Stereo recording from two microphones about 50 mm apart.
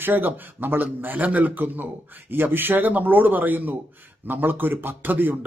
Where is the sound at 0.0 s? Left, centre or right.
Right.